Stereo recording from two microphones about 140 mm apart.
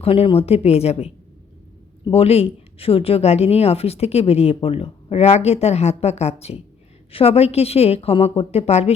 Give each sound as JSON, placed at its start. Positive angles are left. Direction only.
{"t": 0.0, "sound": "speech", "side_deg": 40}